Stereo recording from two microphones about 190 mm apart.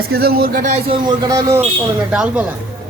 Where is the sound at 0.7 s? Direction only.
30° right (ahead or behind).